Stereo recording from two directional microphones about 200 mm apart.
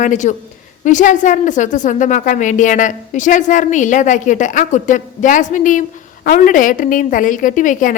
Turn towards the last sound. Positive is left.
turn(degrees=40)  # may be behind; listen again after turning